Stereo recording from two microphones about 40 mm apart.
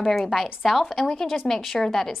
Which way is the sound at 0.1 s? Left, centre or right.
Centre.